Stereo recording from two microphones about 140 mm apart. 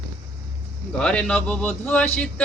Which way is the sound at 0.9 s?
5° left (ahead or behind).